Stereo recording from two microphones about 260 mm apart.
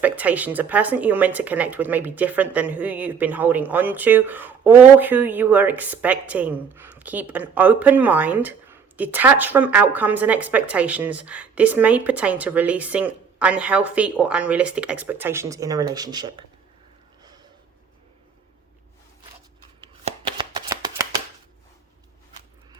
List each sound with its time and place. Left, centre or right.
0.0 s speech: centre
19.8 s shuffling cards: centre